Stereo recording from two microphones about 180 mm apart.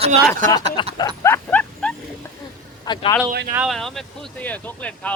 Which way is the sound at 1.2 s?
10° left (ahead or behind).